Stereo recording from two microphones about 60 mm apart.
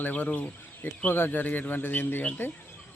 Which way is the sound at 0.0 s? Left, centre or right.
Left.